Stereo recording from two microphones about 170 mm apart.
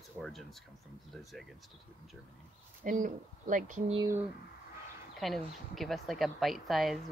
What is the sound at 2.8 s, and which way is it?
Speech, 50° right (ahead or behind).